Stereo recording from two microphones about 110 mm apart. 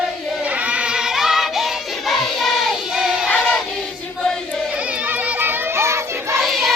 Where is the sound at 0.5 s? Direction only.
10° right (ahead or behind).